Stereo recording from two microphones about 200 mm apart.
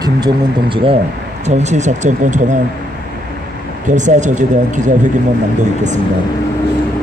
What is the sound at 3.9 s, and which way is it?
Speech, 35° right (ahead or behind).